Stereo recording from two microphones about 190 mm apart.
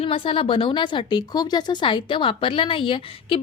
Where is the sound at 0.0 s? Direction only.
30° left (ahead or behind).